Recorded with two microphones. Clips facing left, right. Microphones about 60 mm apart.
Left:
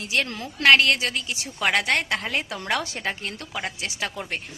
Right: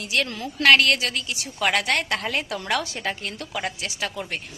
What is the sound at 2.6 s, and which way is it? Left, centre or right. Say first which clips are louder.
A woman's voice: right 1 dB; left.